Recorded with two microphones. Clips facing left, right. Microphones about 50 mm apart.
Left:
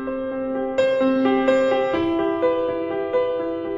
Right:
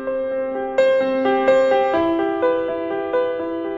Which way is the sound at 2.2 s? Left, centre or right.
Right.